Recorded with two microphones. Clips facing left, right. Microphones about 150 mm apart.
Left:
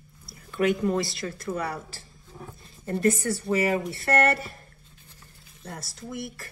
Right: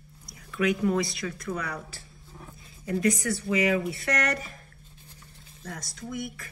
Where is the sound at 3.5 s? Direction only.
40° left (ahead or behind).